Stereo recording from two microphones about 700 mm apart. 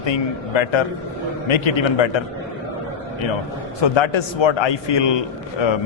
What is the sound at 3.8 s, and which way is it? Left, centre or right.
A man's voice, left.